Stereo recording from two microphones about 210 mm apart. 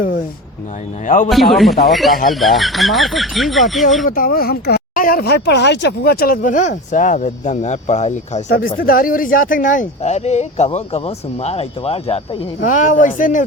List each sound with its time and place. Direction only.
1.0 s speech: 40° left (ahead or behind)
1.3 s speech: centre (ahead or behind)
4.0 s speech: 40° left (ahead or behind)
8.4 s speech: 45° left (ahead or behind)